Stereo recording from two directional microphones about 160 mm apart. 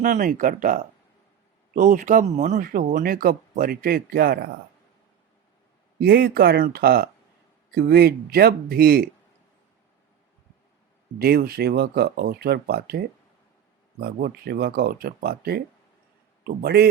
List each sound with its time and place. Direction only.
0.0 s speech: 55° right (ahead or behind)
6.0 s speech: 75° right (ahead or behind)
11.2 s speech: 75° right (ahead or behind)
14.0 s speech: 75° right (ahead or behind)